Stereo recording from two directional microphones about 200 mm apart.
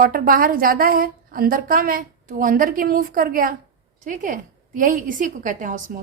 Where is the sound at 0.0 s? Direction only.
45° right (ahead or behind).